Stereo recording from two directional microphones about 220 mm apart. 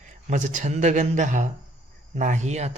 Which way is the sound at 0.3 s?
35° right (ahead or behind).